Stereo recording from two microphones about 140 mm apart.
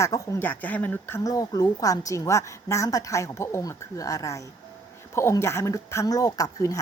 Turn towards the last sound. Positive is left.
turn(degrees=25)  # may be behind; listen again after turning